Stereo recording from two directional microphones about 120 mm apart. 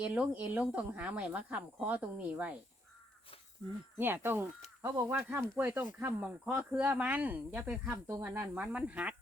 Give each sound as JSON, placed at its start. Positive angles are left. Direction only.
{"t": 0.0, "sound": "speech", "side_deg": -10}
{"t": 3.9, "sound": "speech", "side_deg": -20}
{"t": 8.4, "sound": "speech", "side_deg": -10}